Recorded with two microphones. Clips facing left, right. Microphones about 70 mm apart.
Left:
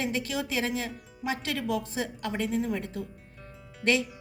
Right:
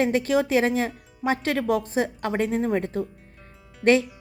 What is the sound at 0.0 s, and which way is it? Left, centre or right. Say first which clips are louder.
A woman's voice: right 9 dB; right.